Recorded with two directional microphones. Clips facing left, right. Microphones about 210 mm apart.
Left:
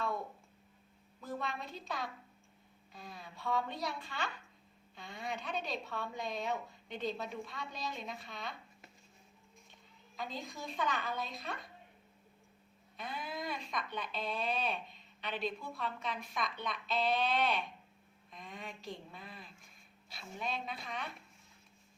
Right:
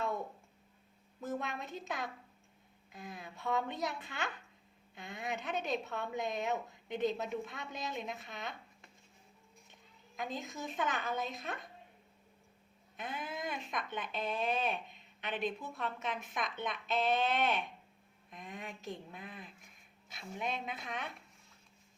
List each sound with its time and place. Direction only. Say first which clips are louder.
1.2 s a woman's voice: right 2 dB; 20° right (ahead or behind)
10.2 s a woman's voice: right 2 dB; 20° right (ahead or behind)
13.0 s a woman's voice: right 1 dB; 20° right (ahead or behind)